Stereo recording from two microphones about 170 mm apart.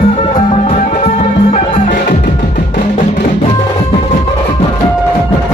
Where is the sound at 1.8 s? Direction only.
55° left (ahead or behind).